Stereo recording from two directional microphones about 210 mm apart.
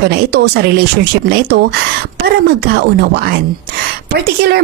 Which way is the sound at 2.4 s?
50° right (ahead or behind).